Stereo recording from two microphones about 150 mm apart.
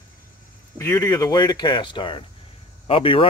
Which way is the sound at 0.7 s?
20° left (ahead or behind).